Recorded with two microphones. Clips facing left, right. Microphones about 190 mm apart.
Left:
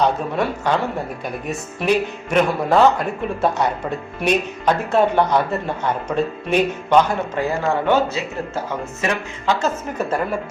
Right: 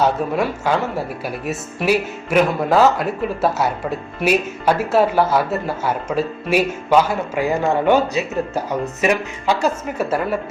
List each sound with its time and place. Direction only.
0.0 s speech: 5° right (ahead or behind)